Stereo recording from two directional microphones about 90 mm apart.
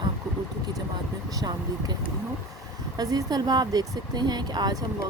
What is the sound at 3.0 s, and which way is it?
A woman's voice, 45° right (ahead or behind).